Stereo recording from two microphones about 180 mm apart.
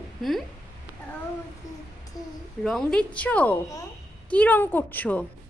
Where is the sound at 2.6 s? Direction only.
5° left (ahead or behind).